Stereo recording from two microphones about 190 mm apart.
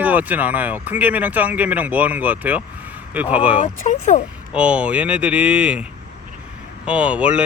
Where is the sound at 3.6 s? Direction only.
40° left (ahead or behind).